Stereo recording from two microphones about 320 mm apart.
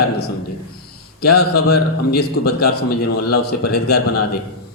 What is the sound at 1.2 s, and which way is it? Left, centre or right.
A man's voice, left.